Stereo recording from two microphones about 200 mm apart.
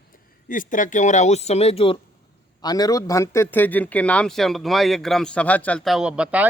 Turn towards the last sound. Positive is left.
turn(degrees=-5)  # may be behind; listen again after turning